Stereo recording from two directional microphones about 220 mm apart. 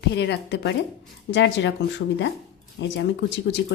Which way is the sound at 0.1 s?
50° left (ahead or behind).